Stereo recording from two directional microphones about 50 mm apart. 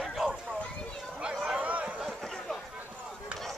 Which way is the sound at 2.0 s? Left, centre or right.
Centre.